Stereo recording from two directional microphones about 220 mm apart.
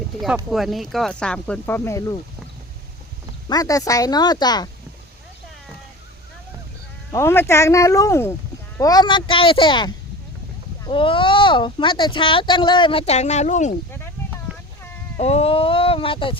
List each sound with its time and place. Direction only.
0.5 s speech: centre (ahead or behind)
3.5 s speech: 15° left (ahead or behind)
7.1 s speech: 10° left (ahead or behind); by 13.7 s 35° left (ahead or behind)
15.2 s speech: 30° left (ahead or behind)